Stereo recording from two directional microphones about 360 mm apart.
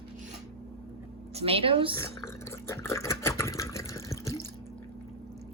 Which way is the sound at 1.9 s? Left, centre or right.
Centre.